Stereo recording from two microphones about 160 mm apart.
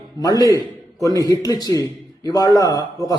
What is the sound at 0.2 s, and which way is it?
Speech, 25° left (ahead or behind).